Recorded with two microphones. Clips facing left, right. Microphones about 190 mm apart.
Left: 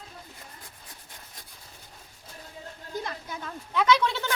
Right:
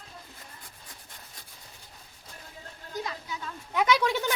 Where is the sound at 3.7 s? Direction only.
15° right (ahead or behind).